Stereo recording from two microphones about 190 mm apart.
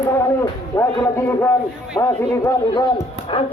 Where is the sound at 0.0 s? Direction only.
20° left (ahead or behind).